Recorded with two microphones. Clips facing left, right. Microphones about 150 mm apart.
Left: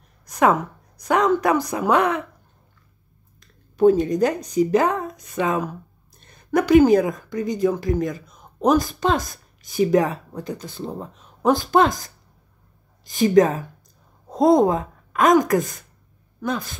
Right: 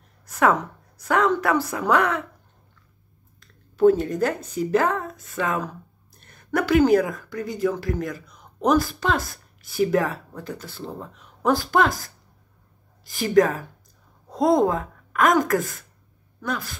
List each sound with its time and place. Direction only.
0.3 s a woman's voice: 15° left (ahead or behind)
3.3 s a woman's voice: 15° left (ahead or behind)